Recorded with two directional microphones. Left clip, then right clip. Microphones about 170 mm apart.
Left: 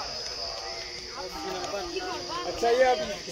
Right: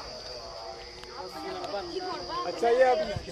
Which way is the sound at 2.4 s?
35° left (ahead or behind).